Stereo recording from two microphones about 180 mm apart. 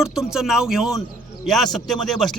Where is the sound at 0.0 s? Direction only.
Centre (ahead or behind).